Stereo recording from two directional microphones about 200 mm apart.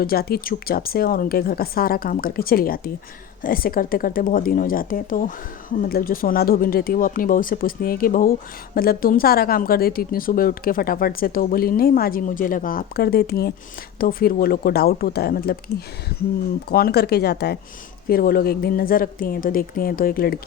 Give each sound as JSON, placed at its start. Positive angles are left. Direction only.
{"t": 0.0, "sound": "speech", "side_deg": 50}
{"t": 16.6, "sound": "speech", "side_deg": 50}